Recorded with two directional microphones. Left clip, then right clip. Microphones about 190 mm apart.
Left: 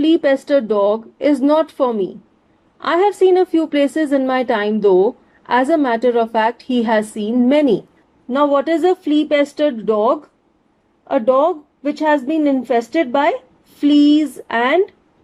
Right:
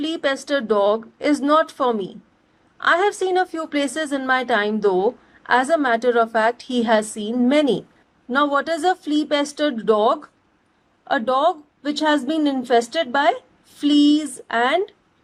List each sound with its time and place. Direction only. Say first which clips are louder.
0.0 s a woman's voice: left 8 dB; 25° left (ahead or behind)